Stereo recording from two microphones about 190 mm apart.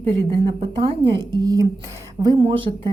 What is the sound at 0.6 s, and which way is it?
A woman's voice, 25° right (ahead or behind).